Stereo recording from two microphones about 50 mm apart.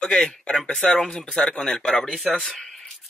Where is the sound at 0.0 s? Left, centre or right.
Centre.